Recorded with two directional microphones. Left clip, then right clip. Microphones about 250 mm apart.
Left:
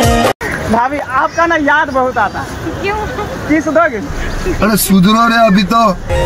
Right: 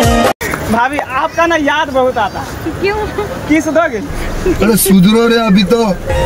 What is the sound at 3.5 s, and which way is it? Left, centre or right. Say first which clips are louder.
Speech: left 1 dB; centre.